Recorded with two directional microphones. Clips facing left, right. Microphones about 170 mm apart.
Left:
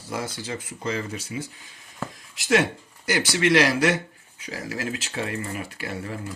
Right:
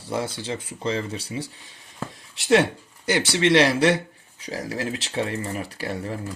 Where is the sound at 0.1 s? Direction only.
30° right (ahead or behind).